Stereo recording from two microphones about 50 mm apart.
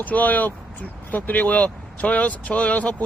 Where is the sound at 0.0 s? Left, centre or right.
Left.